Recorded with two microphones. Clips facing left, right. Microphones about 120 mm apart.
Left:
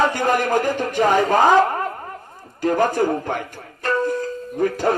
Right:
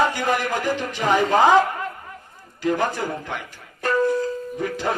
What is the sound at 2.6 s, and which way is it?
Speech, 50° left (ahead or behind).